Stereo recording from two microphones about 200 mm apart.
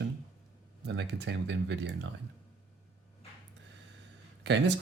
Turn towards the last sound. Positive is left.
turn(degrees=-65)  # may be behind; listen again after turning